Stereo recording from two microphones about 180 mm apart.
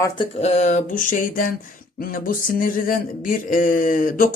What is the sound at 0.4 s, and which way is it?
A man's voice, 40° left (ahead or behind).